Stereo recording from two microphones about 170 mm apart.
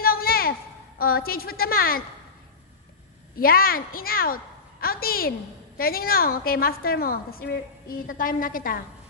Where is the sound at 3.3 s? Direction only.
60° left (ahead or behind).